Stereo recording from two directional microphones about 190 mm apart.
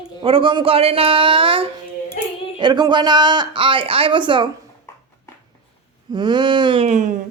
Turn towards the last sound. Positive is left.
turn(degrees=-40)  # may be behind; listen again after turning